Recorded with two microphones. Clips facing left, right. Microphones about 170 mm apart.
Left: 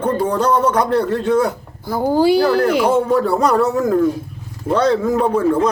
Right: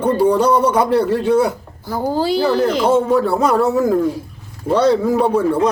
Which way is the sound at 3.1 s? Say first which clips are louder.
Even; centre (ahead or behind).